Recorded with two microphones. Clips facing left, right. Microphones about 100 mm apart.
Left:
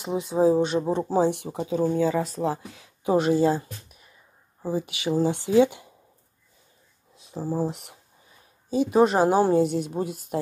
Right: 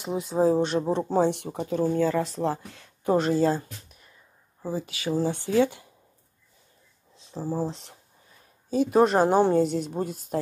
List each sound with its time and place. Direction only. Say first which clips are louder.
0.3 s a woman's voice: left 2 dB; 5° left (ahead or behind)
1.9 s speech: even; 15° left (ahead or behind)
7.2 s speech: left 2 dB; 15° left (ahead or behind)
8.6 s a woman's voice: left 1 dB; centre (ahead or behind)